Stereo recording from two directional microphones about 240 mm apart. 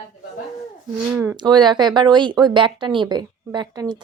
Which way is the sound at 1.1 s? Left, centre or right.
Centre.